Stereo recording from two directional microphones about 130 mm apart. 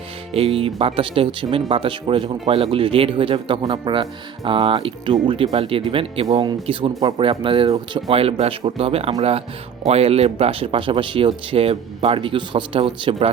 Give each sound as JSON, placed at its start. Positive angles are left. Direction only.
{"t": 0.3, "sound": "speech", "side_deg": -50}